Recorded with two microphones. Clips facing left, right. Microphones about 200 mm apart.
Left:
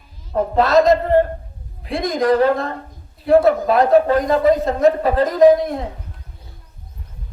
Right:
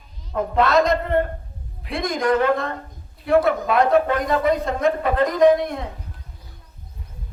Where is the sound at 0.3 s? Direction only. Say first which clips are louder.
Left 3 dB; 35° left (ahead or behind).